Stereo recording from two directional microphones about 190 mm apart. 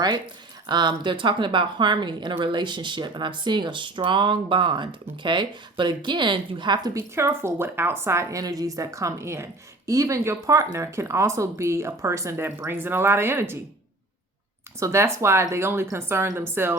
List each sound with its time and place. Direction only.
0.7 s a woman's voice: 25° right (ahead or behind)
14.8 s speech: 15° right (ahead or behind)